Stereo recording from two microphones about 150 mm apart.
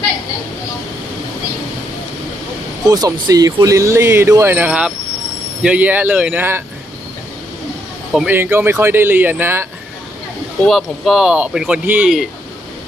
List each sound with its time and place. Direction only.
2.8 s speech: 25° right (ahead or behind)
8.1 s speech: 5° right (ahead or behind)
8.4 s speech: 15° right (ahead or behind)
10.6 s speech: centre (ahead or behind)